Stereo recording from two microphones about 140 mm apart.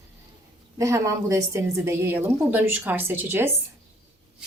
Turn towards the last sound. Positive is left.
turn(degrees=-15)  # may be behind; listen again after turning